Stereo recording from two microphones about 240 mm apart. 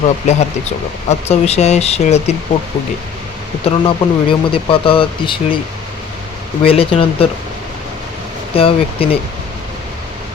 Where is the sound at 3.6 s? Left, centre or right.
Left.